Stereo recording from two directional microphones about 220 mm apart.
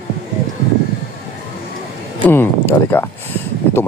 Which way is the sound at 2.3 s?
10° left (ahead or behind).